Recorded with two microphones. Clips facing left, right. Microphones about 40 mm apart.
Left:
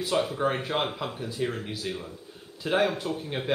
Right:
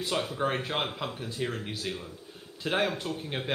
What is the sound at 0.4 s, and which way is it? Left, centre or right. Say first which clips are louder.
Speech: left 3 dB; centre.